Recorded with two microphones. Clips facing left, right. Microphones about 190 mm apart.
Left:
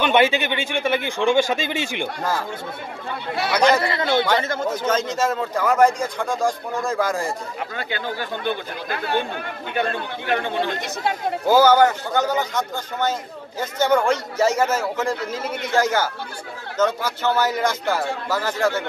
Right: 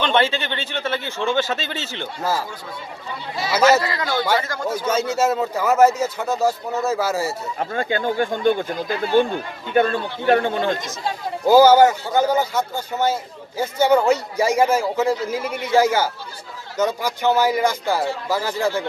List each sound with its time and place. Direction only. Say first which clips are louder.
0.0 s speech: left 2 dB; 10° left (ahead or behind)
3.5 s speech: right 2 dB; 5° right (ahead or behind)
3.8 s speech: left 3 dB; 25° left (ahead or behind)
4.6 s speech: right 1 dB; 10° right (ahead or behind)
7.7 s speech: right 9 dB; 45° right (ahead or behind)
8.7 s speech: right 6 dB; 60° left (ahead or behind)
10.2 s speech: right 5 dB; 50° right (ahead or behind)
10.8 s speech: left 3 dB; 60° left (ahead or behind)
11.4 s speech: right 3 dB; 10° right (ahead or behind)